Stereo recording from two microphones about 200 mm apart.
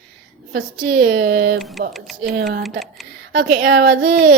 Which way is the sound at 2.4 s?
60° right (ahead or behind).